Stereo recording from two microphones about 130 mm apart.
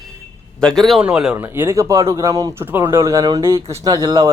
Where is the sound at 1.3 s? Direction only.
20° right (ahead or behind).